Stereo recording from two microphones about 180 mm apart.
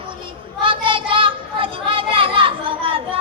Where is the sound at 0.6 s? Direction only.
30° right (ahead or behind).